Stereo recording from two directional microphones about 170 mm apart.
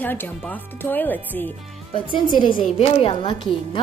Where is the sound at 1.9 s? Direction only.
30° left (ahead or behind).